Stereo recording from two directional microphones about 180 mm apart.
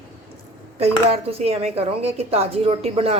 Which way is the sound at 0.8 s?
35° right (ahead or behind).